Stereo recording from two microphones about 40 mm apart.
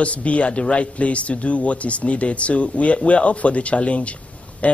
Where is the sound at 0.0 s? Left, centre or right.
Left.